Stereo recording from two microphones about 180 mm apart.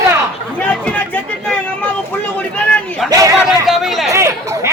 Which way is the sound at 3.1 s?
20° right (ahead or behind).